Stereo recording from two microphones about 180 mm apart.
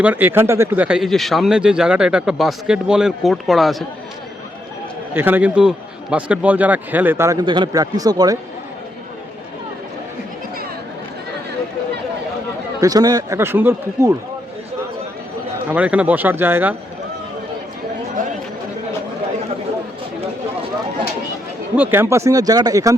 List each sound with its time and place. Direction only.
0.0 s speech: 10° right (ahead or behind)
5.1 s a man's voice: 10° right (ahead or behind)
12.8 s a man's voice: 20° right (ahead or behind)
15.7 s a man's voice: 10° right (ahead or behind)
21.8 s a man's voice: 10° right (ahead or behind)